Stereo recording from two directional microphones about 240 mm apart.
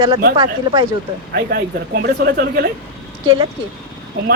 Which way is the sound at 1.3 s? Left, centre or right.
Right.